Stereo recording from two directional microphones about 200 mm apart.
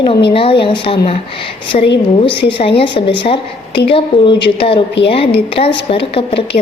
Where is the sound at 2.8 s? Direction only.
25° left (ahead or behind).